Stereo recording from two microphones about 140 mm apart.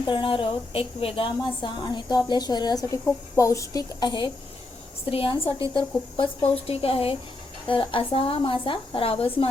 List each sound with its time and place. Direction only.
0.0 s speech: 35° left (ahead or behind)